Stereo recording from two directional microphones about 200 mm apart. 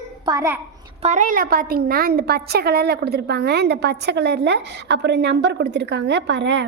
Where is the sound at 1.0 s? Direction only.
35° right (ahead or behind).